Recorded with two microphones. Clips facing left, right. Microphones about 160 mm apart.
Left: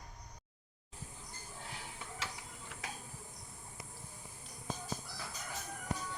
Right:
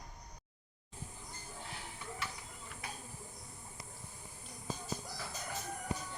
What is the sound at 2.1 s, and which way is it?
Tick-tock, 90° left.